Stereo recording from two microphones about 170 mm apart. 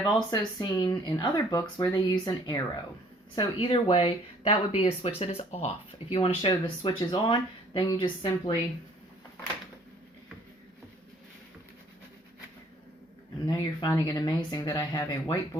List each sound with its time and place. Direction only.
0.0 s speech: 25° left (ahead or behind)
13.8 s speech: 25° left (ahead or behind)